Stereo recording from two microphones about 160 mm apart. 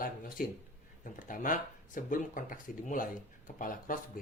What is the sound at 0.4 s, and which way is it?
Speech, 60° left (ahead or behind).